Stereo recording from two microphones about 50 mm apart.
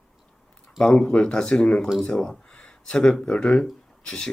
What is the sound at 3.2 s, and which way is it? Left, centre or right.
Speech, centre.